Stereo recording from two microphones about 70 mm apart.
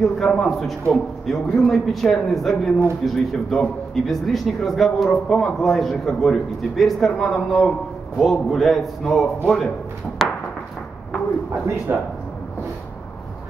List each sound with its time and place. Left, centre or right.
0.0 s a man's voice: centre
11.9 s speech: right